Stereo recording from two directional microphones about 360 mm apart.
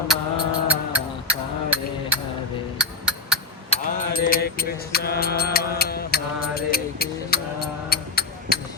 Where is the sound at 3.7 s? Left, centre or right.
Left.